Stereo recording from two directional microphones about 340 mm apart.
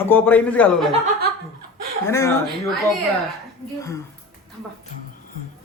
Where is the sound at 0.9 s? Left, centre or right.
Right.